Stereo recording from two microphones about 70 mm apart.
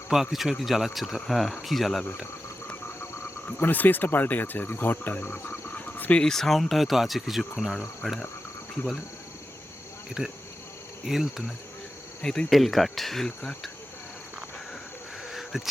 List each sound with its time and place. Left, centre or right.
0.1 s speech: centre
3.6 s cricket: left
6.2 s speech: centre
11.0 s speech: centre
12.2 s speech: centre
15.3 s a sound: centre